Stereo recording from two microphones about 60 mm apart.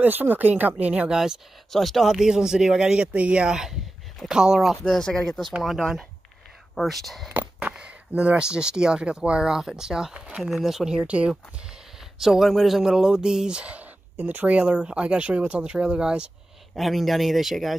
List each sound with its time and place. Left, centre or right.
0.0 s speech: right
1.1 s speech: centre
1.7 s speech: centre
4.8 s speech: centre
8.1 s speech: right
10.5 s speech: centre
11.1 s speech: right
12.2 s speech: centre
16.7 s speech: centre